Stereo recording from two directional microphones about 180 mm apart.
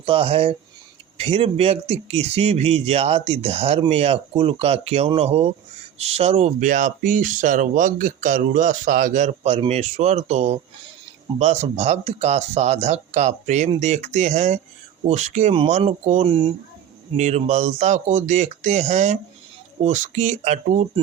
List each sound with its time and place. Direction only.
0.0 s speech: 30° right (ahead or behind)